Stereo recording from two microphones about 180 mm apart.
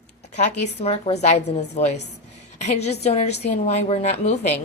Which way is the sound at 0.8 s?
35° left (ahead or behind).